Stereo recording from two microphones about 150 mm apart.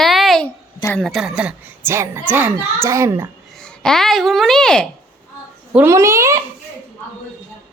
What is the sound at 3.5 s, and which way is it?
A child's voice, 5° left (ahead or behind).